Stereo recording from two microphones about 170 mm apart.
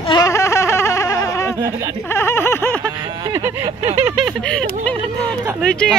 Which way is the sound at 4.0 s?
5° right (ahead or behind).